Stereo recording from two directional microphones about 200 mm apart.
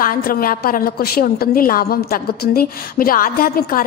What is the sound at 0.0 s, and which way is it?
A woman's voice, 45° left (ahead or behind).